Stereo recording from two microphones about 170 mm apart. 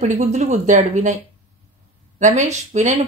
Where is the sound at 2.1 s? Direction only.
45° right (ahead or behind).